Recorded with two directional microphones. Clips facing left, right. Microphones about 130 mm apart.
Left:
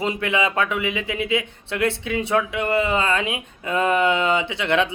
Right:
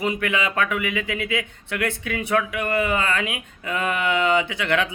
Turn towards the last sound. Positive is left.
turn(degrees=20)  # may be behind; listen again after turning